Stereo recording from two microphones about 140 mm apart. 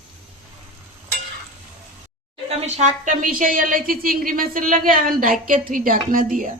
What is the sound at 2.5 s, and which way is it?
Speech, 50° right (ahead or behind).